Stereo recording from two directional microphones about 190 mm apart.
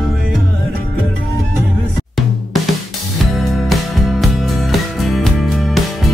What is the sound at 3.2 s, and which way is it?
Music, centre (ahead or behind).